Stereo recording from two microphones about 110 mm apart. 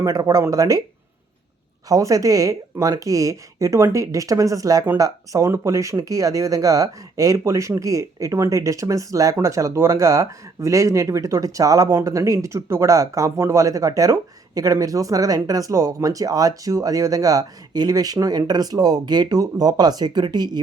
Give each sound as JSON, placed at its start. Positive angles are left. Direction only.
{"t": 0.0, "sound": "speech", "side_deg": -30}
{"t": 1.9, "sound": "speech", "side_deg": -30}